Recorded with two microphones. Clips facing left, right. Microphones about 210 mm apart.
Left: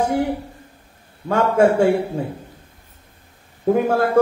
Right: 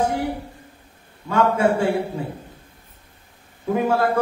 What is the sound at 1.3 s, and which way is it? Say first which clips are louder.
Speech: left 3 dB; 50° left (ahead or behind).